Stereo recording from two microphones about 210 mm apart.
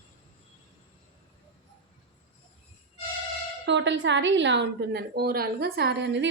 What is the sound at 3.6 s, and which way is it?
Speech, 60° right (ahead or behind).